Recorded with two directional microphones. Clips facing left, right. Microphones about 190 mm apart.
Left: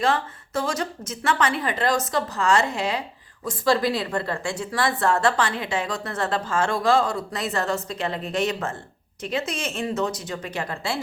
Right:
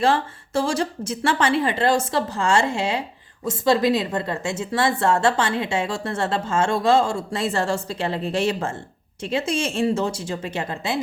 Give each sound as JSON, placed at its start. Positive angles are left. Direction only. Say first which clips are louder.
{"t": 0.0, "sound": "a woman's voice", "louder": "right 3 dB", "side_deg": -30}